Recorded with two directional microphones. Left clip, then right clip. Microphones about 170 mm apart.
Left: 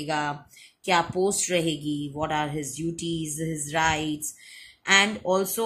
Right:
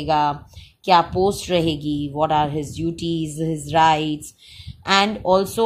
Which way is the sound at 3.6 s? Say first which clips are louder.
Right 9 dB; 35° right (ahead or behind).